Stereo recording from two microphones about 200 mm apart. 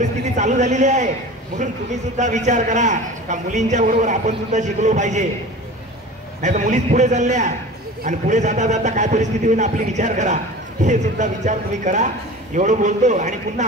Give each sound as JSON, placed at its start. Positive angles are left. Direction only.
{"t": 0.0, "sound": "a man's voice", "side_deg": -35}
{"t": 2.1, "sound": "a man's voice", "side_deg": -35}
{"t": 6.4, "sound": "a man's voice", "side_deg": -35}